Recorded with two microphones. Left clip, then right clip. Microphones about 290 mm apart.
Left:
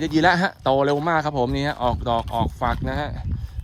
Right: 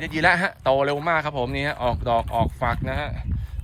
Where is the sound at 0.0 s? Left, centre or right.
Centre.